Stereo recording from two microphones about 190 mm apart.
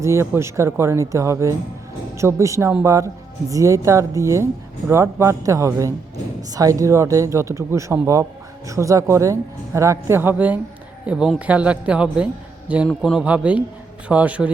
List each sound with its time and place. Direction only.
0.0 s speech: 15° right (ahead or behind)